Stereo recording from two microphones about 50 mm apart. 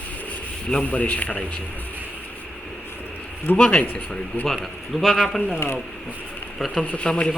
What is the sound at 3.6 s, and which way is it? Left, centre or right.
Speech, left.